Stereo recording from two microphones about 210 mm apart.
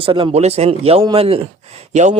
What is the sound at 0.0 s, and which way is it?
Speech, 25° right (ahead or behind).